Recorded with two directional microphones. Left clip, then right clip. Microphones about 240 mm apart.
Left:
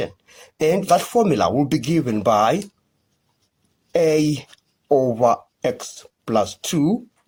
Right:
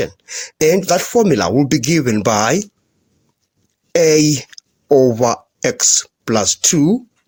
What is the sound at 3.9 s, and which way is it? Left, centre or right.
Speech, right.